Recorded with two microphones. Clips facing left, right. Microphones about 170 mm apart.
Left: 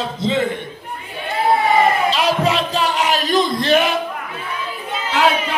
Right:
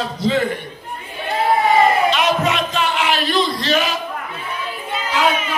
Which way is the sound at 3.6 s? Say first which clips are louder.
Left 4 dB; 55° left (ahead or behind).